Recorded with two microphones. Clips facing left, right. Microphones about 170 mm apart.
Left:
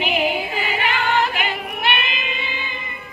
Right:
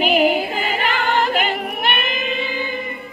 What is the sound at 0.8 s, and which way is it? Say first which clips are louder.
Choir: even; 45° right (ahead or behind).